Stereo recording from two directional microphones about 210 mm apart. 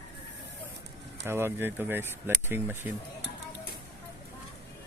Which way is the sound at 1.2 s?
10° right (ahead or behind).